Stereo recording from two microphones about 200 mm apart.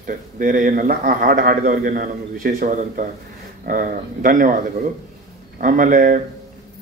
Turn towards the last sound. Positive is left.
turn(degrees=-40)  # may be behind; listen again after turning